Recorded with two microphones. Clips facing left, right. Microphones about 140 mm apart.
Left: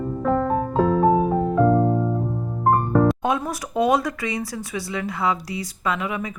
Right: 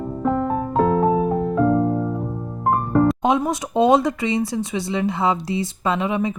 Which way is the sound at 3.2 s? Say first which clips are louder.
Right 4 dB; 20° right (ahead or behind).